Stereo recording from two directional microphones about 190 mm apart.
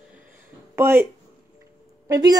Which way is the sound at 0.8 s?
10° right (ahead or behind).